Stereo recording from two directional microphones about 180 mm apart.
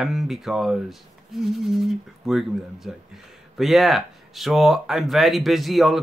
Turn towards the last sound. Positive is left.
turn(degrees=0)  # may be behind; listen again after turning